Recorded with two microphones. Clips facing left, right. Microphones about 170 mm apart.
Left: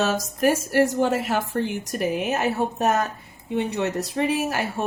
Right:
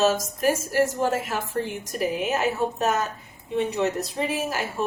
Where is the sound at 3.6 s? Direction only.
70° left (ahead or behind).